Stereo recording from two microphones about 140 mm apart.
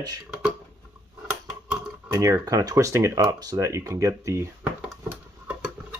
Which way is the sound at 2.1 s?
25° right (ahead or behind).